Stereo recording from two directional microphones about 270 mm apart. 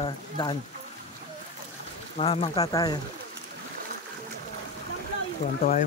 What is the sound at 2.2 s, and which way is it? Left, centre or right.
Speech, left.